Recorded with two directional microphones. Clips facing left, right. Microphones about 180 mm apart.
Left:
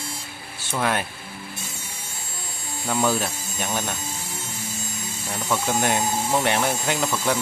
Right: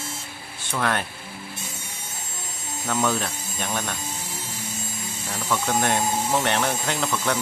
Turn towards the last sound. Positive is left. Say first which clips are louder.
# left 2 dB
turn(degrees=5)  # may be behind; listen again after turning